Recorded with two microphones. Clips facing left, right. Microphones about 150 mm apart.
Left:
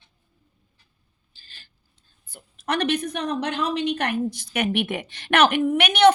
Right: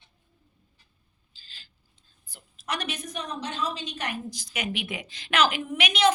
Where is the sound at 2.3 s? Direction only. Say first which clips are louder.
Left 8 dB; 60° left (ahead or behind).